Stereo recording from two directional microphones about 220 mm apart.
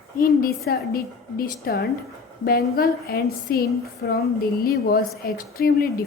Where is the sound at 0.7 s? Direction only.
40° left (ahead or behind).